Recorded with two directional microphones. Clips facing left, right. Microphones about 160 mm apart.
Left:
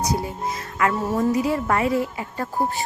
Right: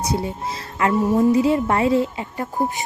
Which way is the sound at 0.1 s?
25° right (ahead or behind).